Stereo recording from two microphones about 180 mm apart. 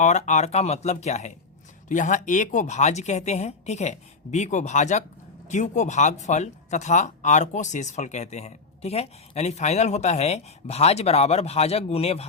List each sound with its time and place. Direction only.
0.0 s speech: 40° left (ahead or behind)